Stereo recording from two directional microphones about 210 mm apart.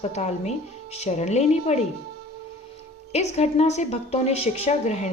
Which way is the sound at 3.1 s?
30° left (ahead or behind).